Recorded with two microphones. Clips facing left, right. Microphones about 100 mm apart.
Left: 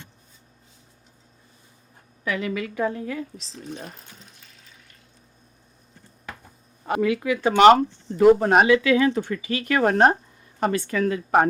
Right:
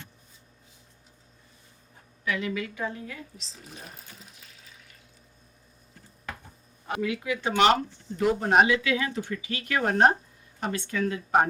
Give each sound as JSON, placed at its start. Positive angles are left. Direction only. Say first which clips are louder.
{"t": 2.2, "sound": "a woman's voice", "louder": "left 3 dB", "side_deg": 45}
{"t": 3.5, "sound": "water", "louder": "left 9 dB", "side_deg": 0}
{"t": 6.8, "sound": "speech", "louder": "left 7 dB", "side_deg": 50}
{"t": 8.7, "sound": "speech", "louder": "left 8 dB", "side_deg": 55}